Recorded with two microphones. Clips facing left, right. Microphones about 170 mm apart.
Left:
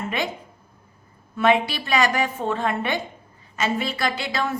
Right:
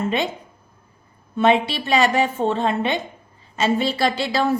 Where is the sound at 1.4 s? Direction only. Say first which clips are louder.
Right 2 dB; 25° right (ahead or behind).